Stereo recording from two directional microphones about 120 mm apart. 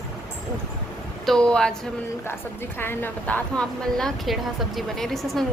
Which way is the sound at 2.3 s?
20° left (ahead or behind).